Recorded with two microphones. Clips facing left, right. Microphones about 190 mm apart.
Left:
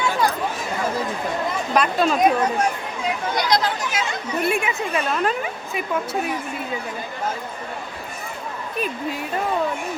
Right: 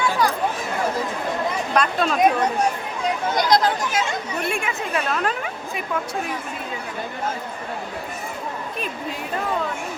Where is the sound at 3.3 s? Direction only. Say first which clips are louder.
Right 3 dB; 45° right (ahead or behind).